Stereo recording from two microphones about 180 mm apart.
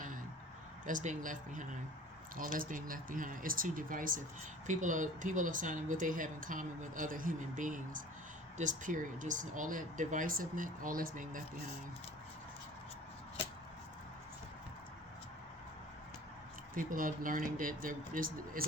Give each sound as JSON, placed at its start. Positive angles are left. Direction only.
{"t": 0.9, "sound": "speech", "side_deg": -45}
{"t": 16.7, "sound": "speech", "side_deg": -50}